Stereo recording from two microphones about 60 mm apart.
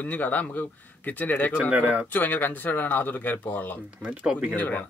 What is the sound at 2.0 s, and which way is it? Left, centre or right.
Speech, left.